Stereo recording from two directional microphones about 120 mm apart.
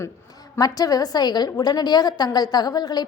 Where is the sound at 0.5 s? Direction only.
30° left (ahead or behind).